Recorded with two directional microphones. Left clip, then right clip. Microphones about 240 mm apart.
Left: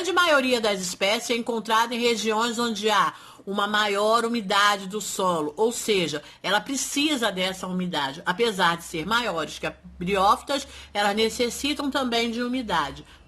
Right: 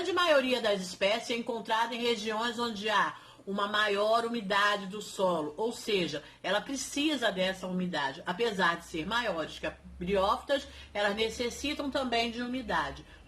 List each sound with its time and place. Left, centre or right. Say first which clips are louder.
0.1 s speech: left 6 dB; left